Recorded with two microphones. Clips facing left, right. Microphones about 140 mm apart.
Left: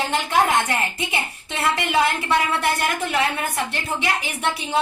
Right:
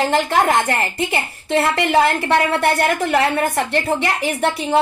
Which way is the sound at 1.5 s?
60° right (ahead or behind).